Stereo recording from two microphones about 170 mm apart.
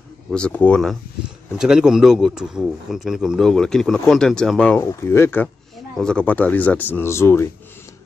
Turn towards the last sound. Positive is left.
turn(degrees=15)  # may be behind; listen again after turning